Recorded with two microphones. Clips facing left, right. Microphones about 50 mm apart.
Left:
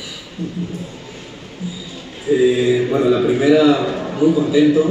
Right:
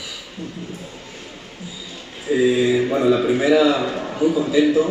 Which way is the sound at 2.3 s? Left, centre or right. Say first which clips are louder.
Left 4 dB; right.